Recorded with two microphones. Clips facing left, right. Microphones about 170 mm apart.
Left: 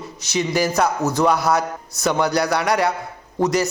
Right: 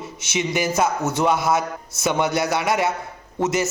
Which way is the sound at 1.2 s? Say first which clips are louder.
Left 1 dB; centre (ahead or behind).